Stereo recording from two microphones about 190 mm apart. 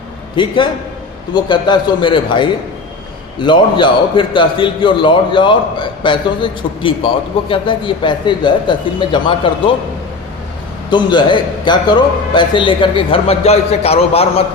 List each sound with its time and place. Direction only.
0.3 s a man's voice: 25° left (ahead or behind)
10.8 s a man's voice: 25° left (ahead or behind)